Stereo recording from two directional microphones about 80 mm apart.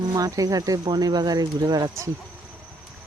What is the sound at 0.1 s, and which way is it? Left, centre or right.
Speech, right.